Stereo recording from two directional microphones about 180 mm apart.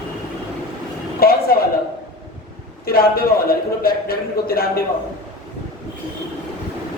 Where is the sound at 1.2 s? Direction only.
55° left (ahead or behind).